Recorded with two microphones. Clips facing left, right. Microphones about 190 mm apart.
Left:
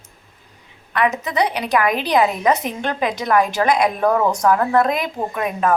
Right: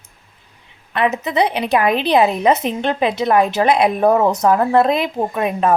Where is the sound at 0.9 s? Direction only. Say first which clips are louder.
Right 2 dB; 25° right (ahead or behind).